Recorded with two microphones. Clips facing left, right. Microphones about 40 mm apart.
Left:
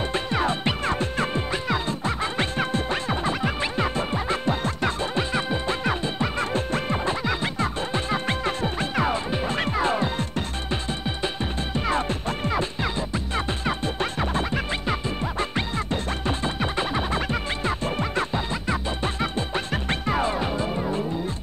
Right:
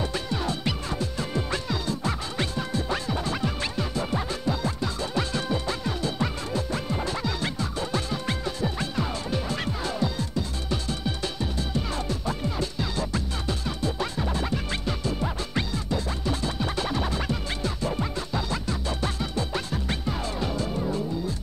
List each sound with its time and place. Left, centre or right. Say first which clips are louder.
0.1 s music: left 5 dB; left
5.1 s music: left 2 dB; left
6.5 s music: left 4 dB; left
9.1 s music: left 4 dB; left
9.7 s music: left 5 dB; left
12.5 s music: left 3 dB; left
13.7 s music: left 3 dB; left
14.9 s music: left 2 dB; left
17.1 s music: left 4 dB; left
18.5 s music: left 3 dB; left